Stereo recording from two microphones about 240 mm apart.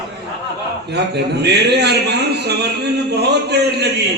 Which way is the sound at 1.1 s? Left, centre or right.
Right.